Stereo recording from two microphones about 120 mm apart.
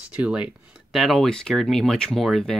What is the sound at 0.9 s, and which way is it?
Speech, centre (ahead or behind).